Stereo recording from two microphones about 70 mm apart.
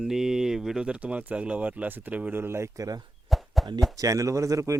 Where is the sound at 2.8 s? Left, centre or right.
Right.